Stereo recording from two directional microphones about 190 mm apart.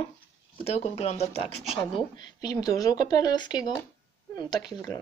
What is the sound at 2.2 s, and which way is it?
Speech, 20° left (ahead or behind).